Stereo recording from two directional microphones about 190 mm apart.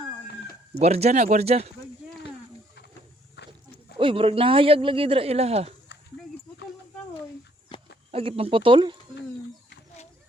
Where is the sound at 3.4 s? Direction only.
65° left (ahead or behind).